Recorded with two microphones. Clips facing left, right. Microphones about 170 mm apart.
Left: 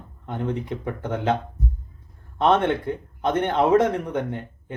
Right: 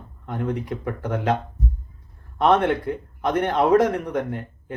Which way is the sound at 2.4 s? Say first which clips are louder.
Right 1 dB; 25° left (ahead or behind).